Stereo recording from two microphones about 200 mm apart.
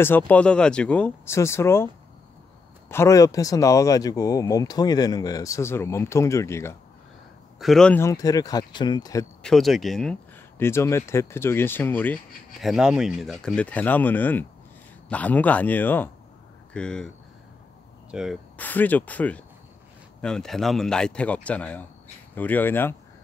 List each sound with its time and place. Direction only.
0.0 s speech: 10° left (ahead or behind)
2.9 s speech: 15° left (ahead or behind)
7.5 s speech: centre (ahead or behind); by 9.2 s 20° left (ahead or behind)
9.4 s speech: centre (ahead or behind)
12.6 s speech: 5° right (ahead or behind)
18.1 s speech: centre (ahead or behind)
18.6 s speech: 10° left (ahead or behind)